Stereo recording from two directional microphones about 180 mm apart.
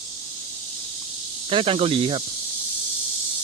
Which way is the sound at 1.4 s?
30° right (ahead or behind).